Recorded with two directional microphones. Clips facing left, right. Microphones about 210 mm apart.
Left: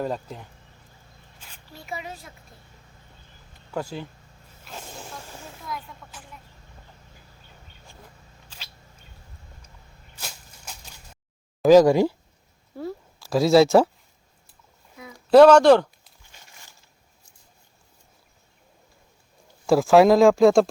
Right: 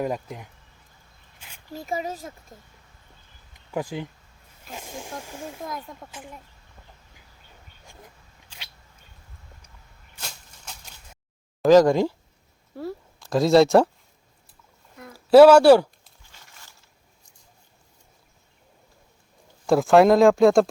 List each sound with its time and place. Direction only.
0.0 s speech: 10° right (ahead or behind)
1.7 s a child's voice: 40° right (ahead or behind)
3.5 s speech: 15° right (ahead or behind)
5.5 s a child's voice: 45° right (ahead or behind)
10.2 s a sound: 5° left (ahead or behind)
11.6 s speech: 10° left (ahead or behind)
12.7 s a sound: centre (ahead or behind)
14.9 s a sound: centre (ahead or behind)
19.6 s speech: centre (ahead or behind)